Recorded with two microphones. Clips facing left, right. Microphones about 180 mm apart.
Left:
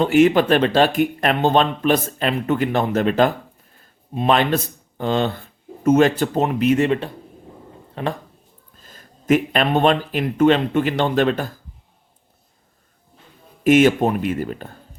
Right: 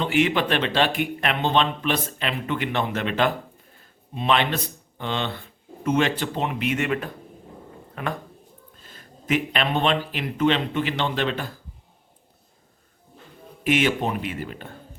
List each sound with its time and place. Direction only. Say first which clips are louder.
0.0 s speech: left 7 dB; 45° left (ahead or behind)
8.8 s speech: left 1 dB; 40° left (ahead or behind)
13.7 s speech: left 8 dB; 45° left (ahead or behind)